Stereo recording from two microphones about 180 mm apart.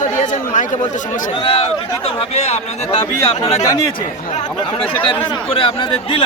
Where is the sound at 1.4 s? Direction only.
30° left (ahead or behind).